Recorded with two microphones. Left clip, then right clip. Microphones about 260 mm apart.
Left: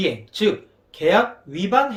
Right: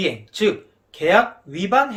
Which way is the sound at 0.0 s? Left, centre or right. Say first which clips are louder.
Even; centre.